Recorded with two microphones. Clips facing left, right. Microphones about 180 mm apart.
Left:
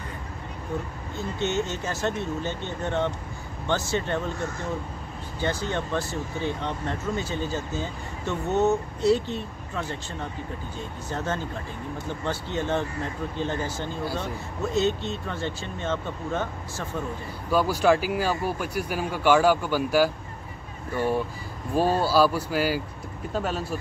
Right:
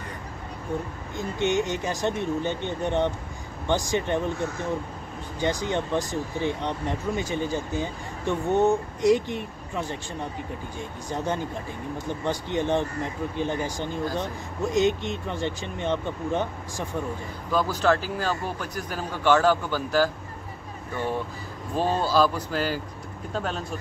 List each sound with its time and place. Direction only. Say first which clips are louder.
1.1 s speech: right 2 dB; 15° right (ahead or behind)
17.5 s speech: left 2 dB; 10° left (ahead or behind)